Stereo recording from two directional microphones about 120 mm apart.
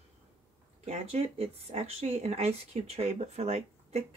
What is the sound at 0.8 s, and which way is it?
Speech, 60° right (ahead or behind).